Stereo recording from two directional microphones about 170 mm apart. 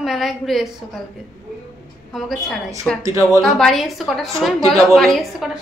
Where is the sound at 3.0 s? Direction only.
15° right (ahead or behind).